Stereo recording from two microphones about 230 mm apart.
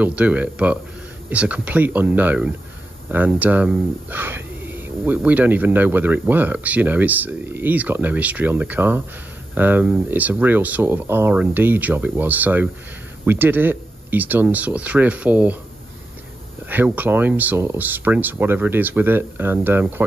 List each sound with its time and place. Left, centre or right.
0.0 s speech: centre
16.6 s speech: centre